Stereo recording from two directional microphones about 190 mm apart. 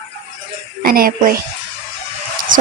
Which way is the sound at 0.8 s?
50° right (ahead or behind).